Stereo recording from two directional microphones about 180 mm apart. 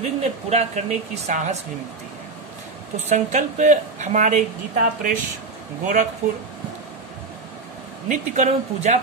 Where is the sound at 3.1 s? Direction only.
40° right (ahead or behind).